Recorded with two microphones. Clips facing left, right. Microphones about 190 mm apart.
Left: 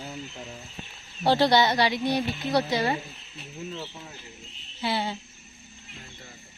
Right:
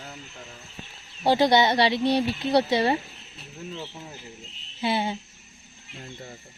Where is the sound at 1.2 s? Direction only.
15° right (ahead or behind).